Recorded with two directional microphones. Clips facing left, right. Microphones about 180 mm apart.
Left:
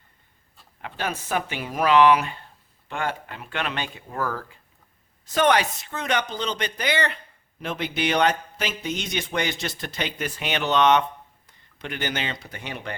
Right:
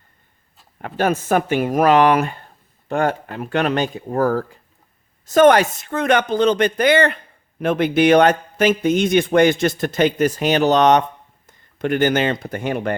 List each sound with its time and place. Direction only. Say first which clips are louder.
0.8 s a man's voice: right 10 dB; 50° right (ahead or behind)